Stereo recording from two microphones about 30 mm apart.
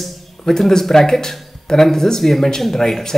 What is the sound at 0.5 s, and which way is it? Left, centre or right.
Speech, centre.